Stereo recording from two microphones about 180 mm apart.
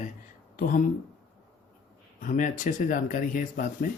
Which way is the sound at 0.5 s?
50° left (ahead or behind).